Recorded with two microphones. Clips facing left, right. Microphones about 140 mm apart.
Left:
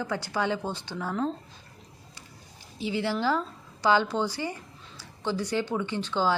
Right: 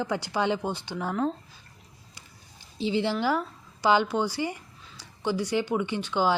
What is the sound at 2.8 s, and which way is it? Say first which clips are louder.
Speech: right 3 dB; 25° right (ahead or behind).